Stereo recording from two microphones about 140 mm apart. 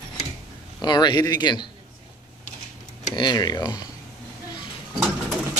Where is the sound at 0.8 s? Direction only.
30° left (ahead or behind).